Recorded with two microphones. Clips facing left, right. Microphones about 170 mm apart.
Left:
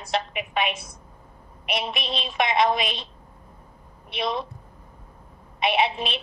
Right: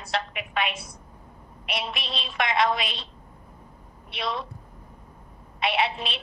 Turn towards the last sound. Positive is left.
turn(degrees=20)  # may be behind; listen again after turning